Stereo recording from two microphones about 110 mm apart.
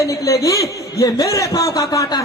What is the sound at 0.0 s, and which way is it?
A man's voice, 30° left (ahead or behind).